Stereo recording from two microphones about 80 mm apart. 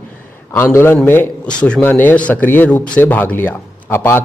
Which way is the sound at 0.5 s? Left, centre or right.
Left.